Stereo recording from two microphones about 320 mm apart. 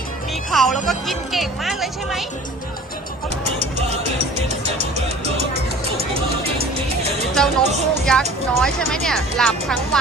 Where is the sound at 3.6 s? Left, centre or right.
Centre.